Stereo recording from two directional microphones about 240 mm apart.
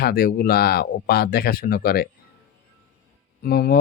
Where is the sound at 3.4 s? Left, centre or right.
Left.